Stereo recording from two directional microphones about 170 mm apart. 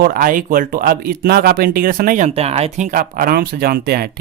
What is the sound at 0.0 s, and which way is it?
Speech, 55° right (ahead or behind).